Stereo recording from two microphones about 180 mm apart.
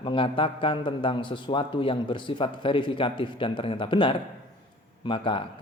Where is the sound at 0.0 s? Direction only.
30° left (ahead or behind).